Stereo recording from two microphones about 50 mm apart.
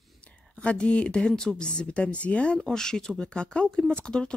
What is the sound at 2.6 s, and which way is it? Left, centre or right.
Speech, centre.